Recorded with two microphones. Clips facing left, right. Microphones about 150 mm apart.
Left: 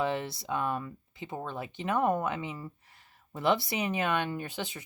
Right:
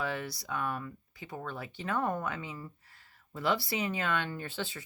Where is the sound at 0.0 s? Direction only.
25° left (ahead or behind).